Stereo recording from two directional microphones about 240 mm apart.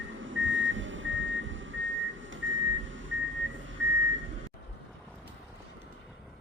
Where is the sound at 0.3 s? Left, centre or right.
Right.